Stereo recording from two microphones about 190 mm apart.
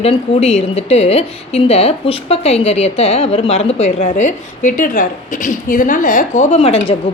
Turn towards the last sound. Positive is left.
turn(degrees=30)  # may be behind; listen again after turning